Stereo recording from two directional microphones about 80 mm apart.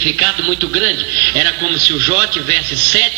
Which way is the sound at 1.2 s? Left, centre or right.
Left.